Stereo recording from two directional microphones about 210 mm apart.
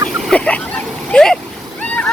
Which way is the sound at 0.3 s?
5° left (ahead or behind).